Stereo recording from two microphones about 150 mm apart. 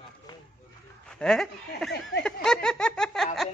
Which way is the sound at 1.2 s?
5° left (ahead or behind).